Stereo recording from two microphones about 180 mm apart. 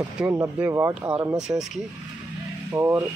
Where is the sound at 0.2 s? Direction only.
10° right (ahead or behind).